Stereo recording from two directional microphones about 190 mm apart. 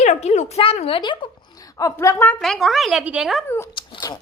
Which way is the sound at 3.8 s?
25° left (ahead or behind).